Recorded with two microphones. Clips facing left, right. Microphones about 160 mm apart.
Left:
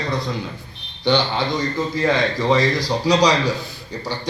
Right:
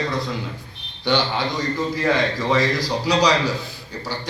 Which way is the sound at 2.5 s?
10° right (ahead or behind).